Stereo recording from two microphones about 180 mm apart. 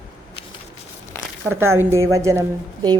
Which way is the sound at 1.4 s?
15° right (ahead or behind).